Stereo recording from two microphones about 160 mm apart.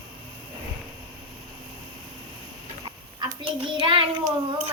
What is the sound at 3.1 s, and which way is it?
A child's voice, 30° right (ahead or behind).